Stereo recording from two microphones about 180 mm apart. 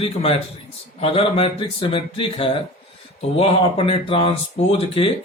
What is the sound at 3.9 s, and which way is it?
Speech, 30° left (ahead or behind).